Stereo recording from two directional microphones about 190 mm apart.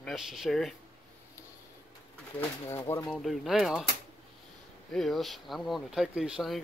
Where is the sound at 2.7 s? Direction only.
15° left (ahead or behind).